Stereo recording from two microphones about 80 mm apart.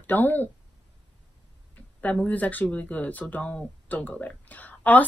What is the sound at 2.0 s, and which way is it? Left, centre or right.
Speech, left.